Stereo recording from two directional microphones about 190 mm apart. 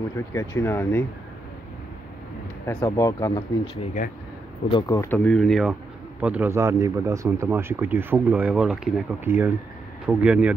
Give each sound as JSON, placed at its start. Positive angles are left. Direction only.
{"t": 0.3, "sound": "speech", "side_deg": 15}
{"t": 2.6, "sound": "speech", "side_deg": 15}
{"t": 3.7, "sound": "speech", "side_deg": 35}
{"t": 4.6, "sound": "speech", "side_deg": 20}